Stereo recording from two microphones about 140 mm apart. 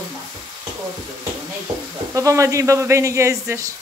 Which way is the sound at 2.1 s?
20° right (ahead or behind).